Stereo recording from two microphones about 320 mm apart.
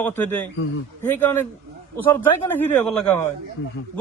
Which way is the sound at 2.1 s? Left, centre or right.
Centre.